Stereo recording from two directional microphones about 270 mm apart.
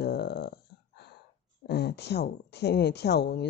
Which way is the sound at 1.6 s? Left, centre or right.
Left.